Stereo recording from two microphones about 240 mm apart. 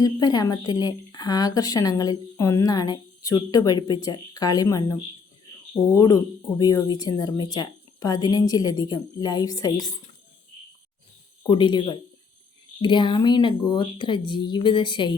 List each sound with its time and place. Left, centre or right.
0.0 s a woman's voice: centre
11.4 s speech: centre